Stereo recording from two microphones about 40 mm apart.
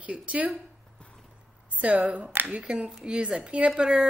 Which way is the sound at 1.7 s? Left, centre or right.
Right.